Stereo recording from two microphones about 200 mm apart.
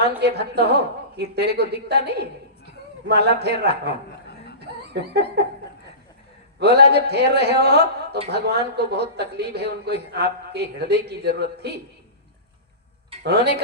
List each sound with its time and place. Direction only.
0.2 s speech: 55° right (ahead or behind)
4.6 s laughter: 55° right (ahead or behind)
6.6 s speech: 55° right (ahead or behind)
13.2 s speech: 55° right (ahead or behind)